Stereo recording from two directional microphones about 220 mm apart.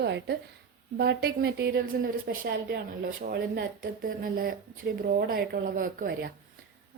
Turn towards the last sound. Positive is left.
turn(degrees=-40)  # may be behind; listen again after turning